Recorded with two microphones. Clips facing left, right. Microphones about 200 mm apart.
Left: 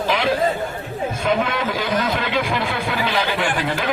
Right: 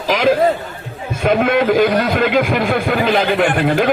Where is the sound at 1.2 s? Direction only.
55° right (ahead or behind).